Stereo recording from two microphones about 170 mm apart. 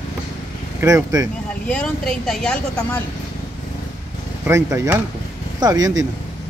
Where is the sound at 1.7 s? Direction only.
5° left (ahead or behind).